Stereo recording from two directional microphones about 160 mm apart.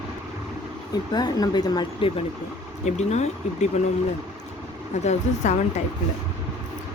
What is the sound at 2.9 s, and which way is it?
Speech, 45° left (ahead or behind).